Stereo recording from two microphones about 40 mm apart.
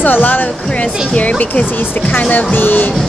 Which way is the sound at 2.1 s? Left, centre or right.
Left.